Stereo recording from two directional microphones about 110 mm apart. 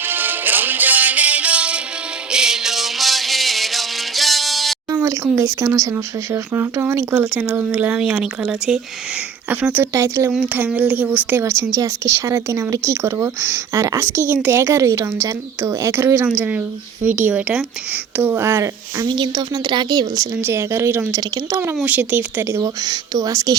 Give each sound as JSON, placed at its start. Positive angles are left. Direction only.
{"t": 0.0, "sound": "music", "side_deg": -20}
{"t": 5.0, "sound": "speech", "side_deg": -25}
{"t": 18.2, "sound": "speech", "side_deg": -20}
{"t": 19.0, "sound": "speech", "side_deg": -45}
{"t": 20.4, "sound": "speech", "side_deg": -25}